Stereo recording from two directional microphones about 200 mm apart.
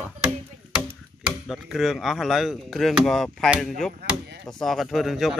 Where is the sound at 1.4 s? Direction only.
Centre (ahead or behind).